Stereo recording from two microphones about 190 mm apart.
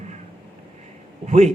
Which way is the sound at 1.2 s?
35° right (ahead or behind).